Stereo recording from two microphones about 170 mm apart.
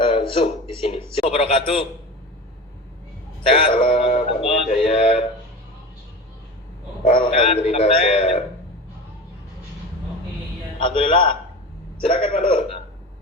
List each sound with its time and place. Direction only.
0.0 s a man's voice: 30° left (ahead or behind)
3.5 s synthetic singing: 30° left (ahead or behind)
7.0 s a man's voice: 35° left (ahead or behind)
10.8 s a man's voice: 30° left (ahead or behind)